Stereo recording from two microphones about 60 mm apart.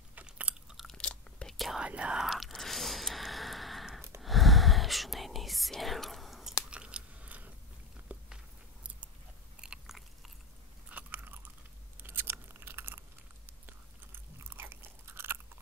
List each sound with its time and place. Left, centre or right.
0.3 s chewing: centre
0.9 s crunch: centre
1.8 s whispering: centre
2.2 s squish: centre
4.2 s whispering: centre
6.7 s biting: centre
8.1 s a sound: right
9.6 s biting: centre
10.9 s crunch: right
14.4 s biting: right